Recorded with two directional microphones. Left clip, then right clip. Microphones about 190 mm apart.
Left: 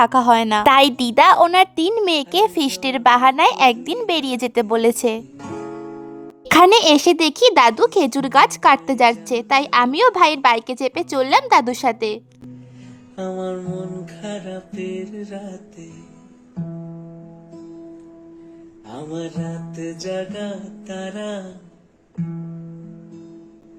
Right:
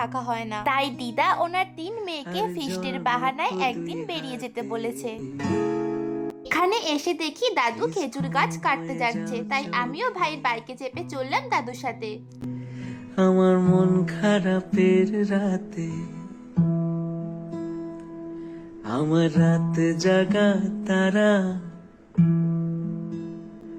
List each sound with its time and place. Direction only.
0.0 s a woman's voice: 65° left (ahead or behind)
6.5 s a child's voice: 65° left (ahead or behind)
13.1 s music: 40° right (ahead or behind)
18.9 s music: 45° right (ahead or behind)